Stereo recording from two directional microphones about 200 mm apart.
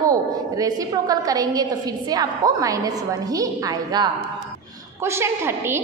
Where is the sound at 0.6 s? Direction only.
20° right (ahead or behind).